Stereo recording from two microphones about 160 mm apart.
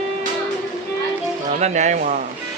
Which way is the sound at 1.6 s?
45° right (ahead or behind).